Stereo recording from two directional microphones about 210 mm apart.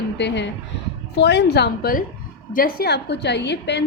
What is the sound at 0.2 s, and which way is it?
A woman's voice, 55° left (ahead or behind).